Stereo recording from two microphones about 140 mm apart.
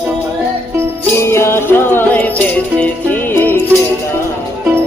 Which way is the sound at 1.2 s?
20° left (ahead or behind).